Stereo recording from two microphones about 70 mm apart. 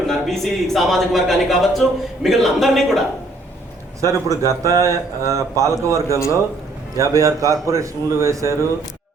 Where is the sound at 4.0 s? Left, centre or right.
Right.